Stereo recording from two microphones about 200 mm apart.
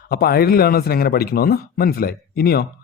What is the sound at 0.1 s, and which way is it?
A man's voice, 50° left (ahead or behind).